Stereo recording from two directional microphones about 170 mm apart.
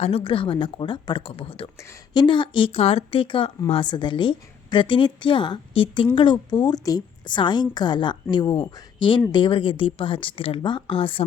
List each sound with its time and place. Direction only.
0.0 s a woman's voice: 35° left (ahead or behind)